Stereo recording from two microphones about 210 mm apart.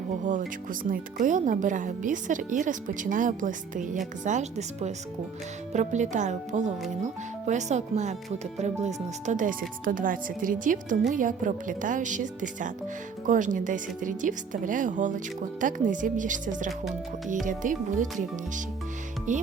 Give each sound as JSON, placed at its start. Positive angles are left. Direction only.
{"t": 0.3, "sound": "speech", "side_deg": -40}
{"t": 19.3, "sound": "speech", "side_deg": -35}